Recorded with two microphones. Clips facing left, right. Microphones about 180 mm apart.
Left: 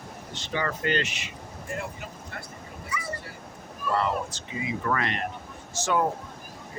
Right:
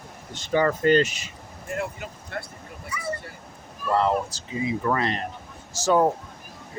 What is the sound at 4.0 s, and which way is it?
Speech, 35° right (ahead or behind).